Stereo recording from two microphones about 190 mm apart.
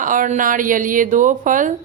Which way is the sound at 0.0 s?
45° right (ahead or behind).